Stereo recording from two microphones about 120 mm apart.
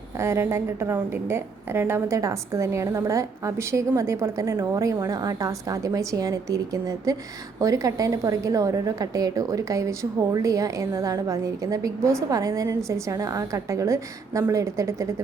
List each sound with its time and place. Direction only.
0.2 s a woman's voice: 20° right (ahead or behind)